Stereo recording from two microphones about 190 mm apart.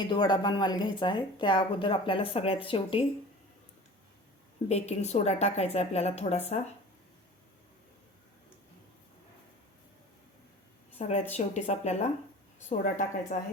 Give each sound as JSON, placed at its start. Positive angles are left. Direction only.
{"t": 0.0, "sound": "speech", "side_deg": 25}
{"t": 4.7, "sound": "a woman's voice", "side_deg": 35}
{"t": 11.0, "sound": "a woman's voice", "side_deg": 35}